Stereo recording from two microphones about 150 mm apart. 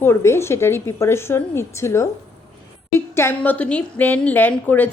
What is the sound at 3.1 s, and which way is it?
A woman's voice, 15° left (ahead or behind).